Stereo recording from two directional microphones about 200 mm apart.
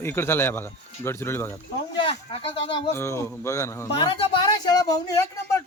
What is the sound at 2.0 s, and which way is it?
Speech, 30° left (ahead or behind).